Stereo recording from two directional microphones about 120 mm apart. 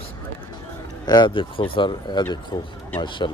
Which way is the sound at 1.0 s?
35° left (ahead or behind).